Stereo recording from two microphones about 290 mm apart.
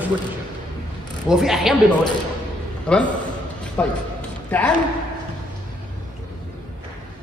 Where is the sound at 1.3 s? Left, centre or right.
Centre.